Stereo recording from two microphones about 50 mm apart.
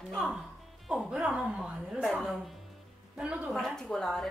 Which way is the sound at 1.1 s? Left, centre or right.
Centre.